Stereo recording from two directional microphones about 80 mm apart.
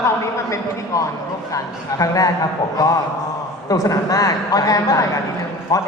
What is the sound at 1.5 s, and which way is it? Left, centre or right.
A man's voice, left.